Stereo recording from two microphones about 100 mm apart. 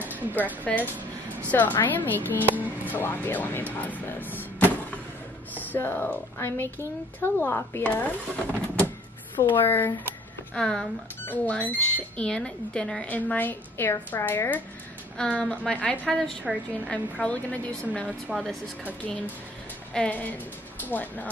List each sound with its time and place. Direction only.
0.0 s music: 15° right (ahead or behind)
0.7 s speech: 5° left (ahead or behind)
1.5 s speech: 20° left (ahead or behind)
10.5 s speech: 5° left (ahead or behind)
15.1 s speech: 10° left (ahead or behind)
16.5 s speech: 5° right (ahead or behind)
16.9 s speech: 15° left (ahead or behind)
18.3 s speech: centre (ahead or behind)
19.9 s speech: 10° left (ahead or behind)